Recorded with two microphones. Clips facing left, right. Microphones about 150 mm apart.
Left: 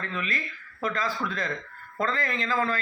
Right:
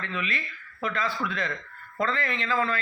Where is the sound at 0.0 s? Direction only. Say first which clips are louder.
Even; 40° left (ahead or behind).